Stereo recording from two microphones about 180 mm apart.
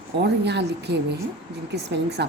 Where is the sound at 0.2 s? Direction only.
70° right (ahead or behind).